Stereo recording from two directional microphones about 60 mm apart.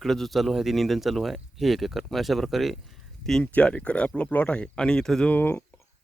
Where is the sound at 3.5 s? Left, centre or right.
Centre.